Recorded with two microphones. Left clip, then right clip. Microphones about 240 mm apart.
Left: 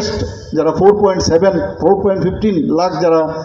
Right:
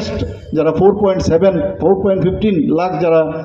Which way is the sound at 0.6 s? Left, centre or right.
Right.